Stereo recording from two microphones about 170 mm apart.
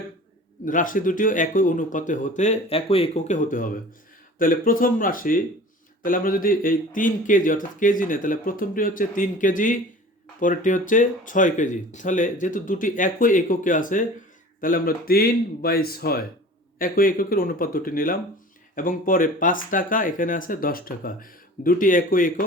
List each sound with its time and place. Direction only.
0.6 s speech: 50° left (ahead or behind)